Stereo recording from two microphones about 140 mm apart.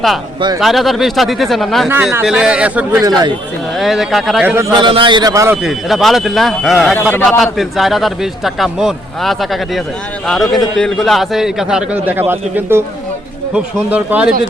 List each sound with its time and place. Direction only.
0.6 s speech: centre (ahead or behind)
3.0 s speech: 30° right (ahead or behind)
3.8 s speech: centre (ahead or behind)
4.7 s a man's voice: 35° right (ahead or behind)
5.6 s speech: centre (ahead or behind)
13.9 s speech: 10° right (ahead or behind)